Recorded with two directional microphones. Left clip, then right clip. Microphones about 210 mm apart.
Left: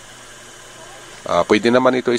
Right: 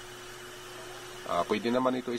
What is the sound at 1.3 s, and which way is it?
Speech, 30° left (ahead or behind).